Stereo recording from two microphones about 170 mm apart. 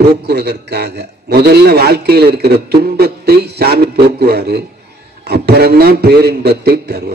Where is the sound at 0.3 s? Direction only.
75° right (ahead or behind).